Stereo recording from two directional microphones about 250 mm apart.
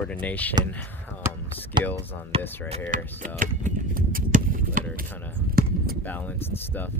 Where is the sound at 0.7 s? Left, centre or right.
Centre.